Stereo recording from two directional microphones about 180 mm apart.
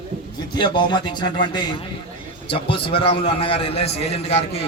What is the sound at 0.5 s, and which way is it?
A man's voice, 25° left (ahead or behind).